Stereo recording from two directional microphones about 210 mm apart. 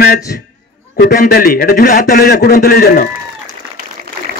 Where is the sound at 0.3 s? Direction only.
45° left (ahead or behind).